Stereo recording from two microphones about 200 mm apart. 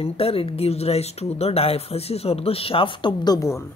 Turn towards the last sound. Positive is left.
turn(degrees=15)  # may be behind; listen again after turning